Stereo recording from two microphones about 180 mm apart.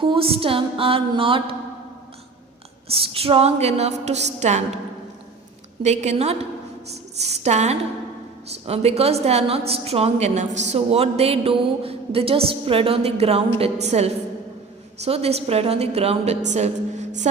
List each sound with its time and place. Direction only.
0.0 s a woman's voice: 30° right (ahead or behind)
2.9 s a woman's voice: 30° right (ahead or behind)
5.8 s a woman's voice: 40° right (ahead or behind)